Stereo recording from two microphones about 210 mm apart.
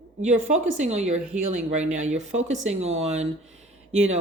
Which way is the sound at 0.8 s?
30° right (ahead or behind).